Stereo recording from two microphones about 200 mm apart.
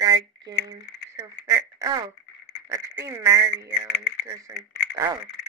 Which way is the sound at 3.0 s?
15° right (ahead or behind).